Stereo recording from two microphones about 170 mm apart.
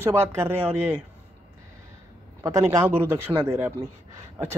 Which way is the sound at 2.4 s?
20° right (ahead or behind).